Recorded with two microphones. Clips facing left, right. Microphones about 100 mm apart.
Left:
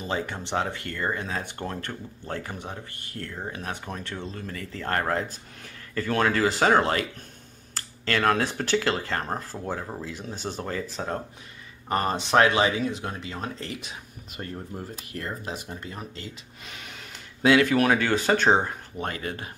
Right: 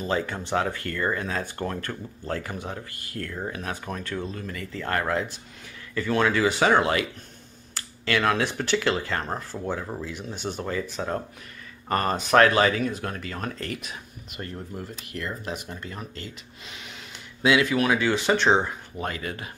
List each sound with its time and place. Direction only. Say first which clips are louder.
0.0 s speech: right 3 dB; 20° left (ahead or behind)
11.9 s speech: right 1 dB; 20° left (ahead or behind)
14.7 s speech: even; 40° left (ahead or behind)
17.4 s speech: left 2 dB; 45° left (ahead or behind)